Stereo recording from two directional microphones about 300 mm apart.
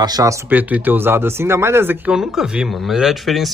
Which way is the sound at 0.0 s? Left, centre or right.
Centre.